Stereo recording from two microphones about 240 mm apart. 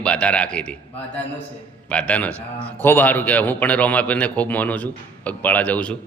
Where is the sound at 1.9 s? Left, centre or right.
Centre.